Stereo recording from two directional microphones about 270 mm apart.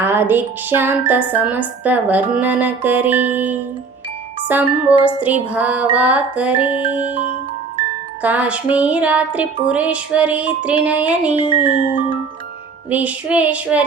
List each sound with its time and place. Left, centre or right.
0.0 s a woman's voice: centre
4.4 s music: centre
8.2 s music: centre
11.4 s music: centre
12.9 s music: centre